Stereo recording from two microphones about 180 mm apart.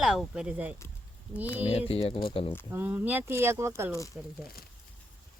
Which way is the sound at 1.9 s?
30° left (ahead or behind).